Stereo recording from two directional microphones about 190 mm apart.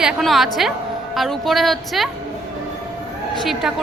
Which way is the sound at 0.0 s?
Centre (ahead or behind).